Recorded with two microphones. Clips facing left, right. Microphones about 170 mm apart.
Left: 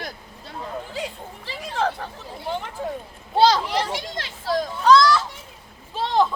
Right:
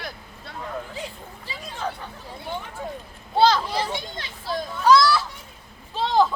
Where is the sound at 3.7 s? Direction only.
85° left.